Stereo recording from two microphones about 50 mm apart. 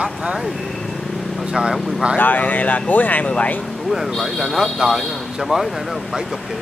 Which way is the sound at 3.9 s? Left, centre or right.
Centre.